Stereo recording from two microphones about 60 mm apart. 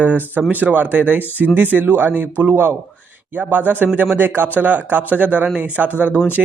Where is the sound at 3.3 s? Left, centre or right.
Right.